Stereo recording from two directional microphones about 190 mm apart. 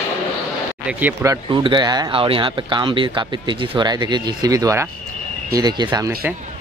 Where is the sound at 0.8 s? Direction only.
10° right (ahead or behind).